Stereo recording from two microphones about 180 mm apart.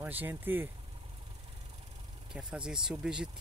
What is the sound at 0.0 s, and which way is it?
Speech, 10° right (ahead or behind).